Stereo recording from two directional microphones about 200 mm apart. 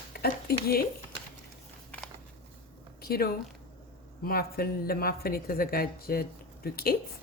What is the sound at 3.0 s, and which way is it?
Speech, 50° left (ahead or behind).